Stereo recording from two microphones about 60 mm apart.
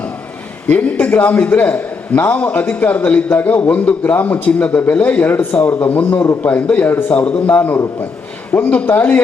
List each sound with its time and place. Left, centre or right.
0.7 s a man's voice: left